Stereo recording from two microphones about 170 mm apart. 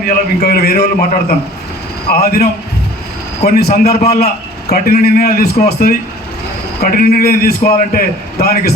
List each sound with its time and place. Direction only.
0.0 s a man's voice: 65° left (ahead or behind)
2.0 s a man's voice: 65° left (ahead or behind)